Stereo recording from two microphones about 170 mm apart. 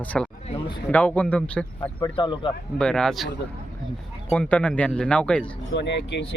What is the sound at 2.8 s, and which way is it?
Speech, 5° left (ahead or behind).